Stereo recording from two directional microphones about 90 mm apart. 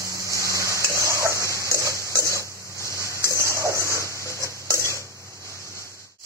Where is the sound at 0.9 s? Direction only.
35° right (ahead or behind).